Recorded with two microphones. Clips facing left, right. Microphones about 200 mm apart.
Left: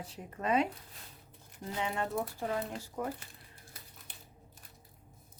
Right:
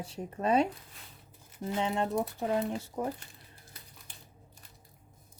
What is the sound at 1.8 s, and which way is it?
Speech, 25° right (ahead or behind).